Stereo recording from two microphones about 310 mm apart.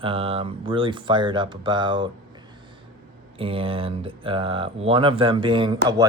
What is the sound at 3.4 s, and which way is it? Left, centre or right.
Speech, centre.